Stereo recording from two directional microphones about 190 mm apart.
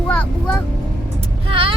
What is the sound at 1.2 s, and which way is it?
Vehicle, 25° right (ahead or behind).